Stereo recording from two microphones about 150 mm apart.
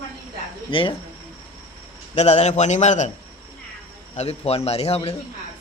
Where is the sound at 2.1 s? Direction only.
45° left (ahead or behind).